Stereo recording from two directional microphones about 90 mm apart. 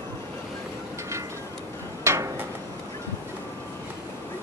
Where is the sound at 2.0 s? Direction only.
30° right (ahead or behind).